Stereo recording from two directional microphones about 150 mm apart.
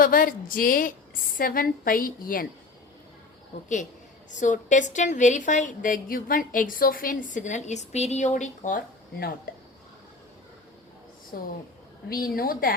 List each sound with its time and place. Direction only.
0.0 s a woman's voice: 70° left (ahead or behind)
4.3 s a woman's voice: 55° left (ahead or behind)
11.3 s a woman's voice: 75° left (ahead or behind)